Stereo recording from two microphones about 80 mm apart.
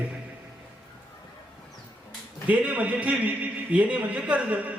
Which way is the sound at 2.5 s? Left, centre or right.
Centre.